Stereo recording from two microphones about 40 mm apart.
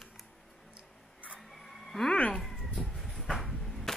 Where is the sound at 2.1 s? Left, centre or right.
Left.